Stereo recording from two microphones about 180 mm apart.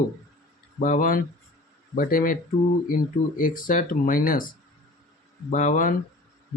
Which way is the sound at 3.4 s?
50° left (ahead or behind).